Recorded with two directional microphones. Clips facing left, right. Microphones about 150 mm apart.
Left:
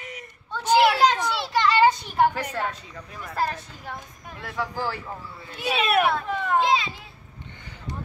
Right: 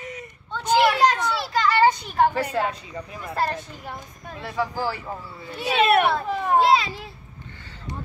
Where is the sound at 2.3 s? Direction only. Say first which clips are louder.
Right 4 dB; 5° right (ahead or behind).